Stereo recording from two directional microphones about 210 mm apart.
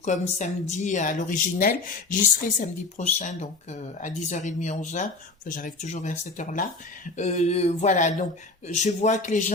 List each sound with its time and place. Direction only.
0.0 s speech: 35° left (ahead or behind)